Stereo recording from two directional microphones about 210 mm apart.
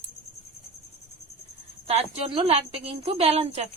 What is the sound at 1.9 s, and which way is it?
A woman's voice, 30° right (ahead or behind).